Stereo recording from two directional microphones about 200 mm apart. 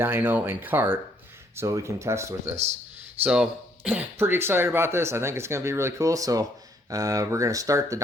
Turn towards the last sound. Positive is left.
turn(degrees=-15)  # may be behind; listen again after turning